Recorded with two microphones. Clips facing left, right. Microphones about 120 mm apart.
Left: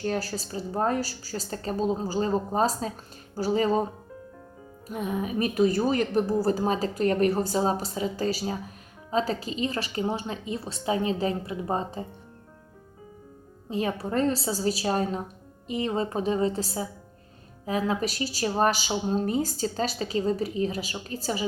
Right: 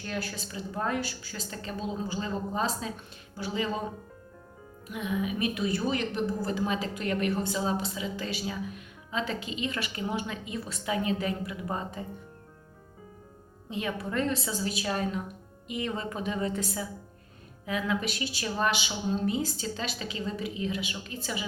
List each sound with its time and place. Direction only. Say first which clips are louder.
0.0 s a woman's voice: left 6 dB; 35° left (ahead or behind)
4.9 s a woman's voice: left 2 dB; 40° left (ahead or behind)
13.7 s a woman's voice: left 5 dB; 35° left (ahead or behind)